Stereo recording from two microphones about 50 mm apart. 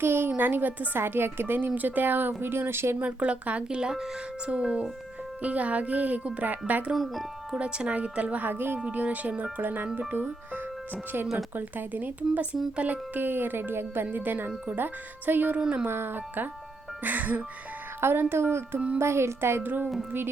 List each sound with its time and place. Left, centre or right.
0.0 s a woman's voice: right
0.3 s a woman's voice: right
3.0 s speech: right
6.9 s speech: centre
7.5 s speech: right
8.4 s a woman's voice: right
8.8 s speech: right
13.1 s a woman's voice: right
15.9 s a woman's voice: right
18.0 s a woman's voice: right
19.6 s speech: right